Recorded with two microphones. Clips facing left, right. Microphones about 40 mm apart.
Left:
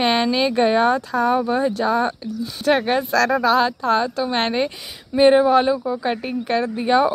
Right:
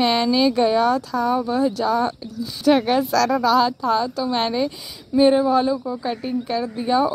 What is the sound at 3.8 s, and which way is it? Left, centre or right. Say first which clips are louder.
A woman's voice: left 1 dB; left.